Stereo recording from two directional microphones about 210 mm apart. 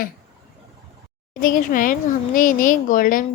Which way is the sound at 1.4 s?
40° left (ahead or behind).